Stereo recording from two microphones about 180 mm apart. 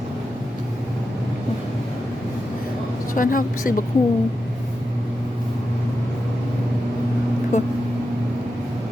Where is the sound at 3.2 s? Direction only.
50° left (ahead or behind).